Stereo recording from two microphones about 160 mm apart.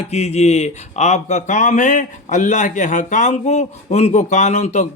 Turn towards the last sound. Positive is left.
turn(degrees=45)  # may be behind; listen again after turning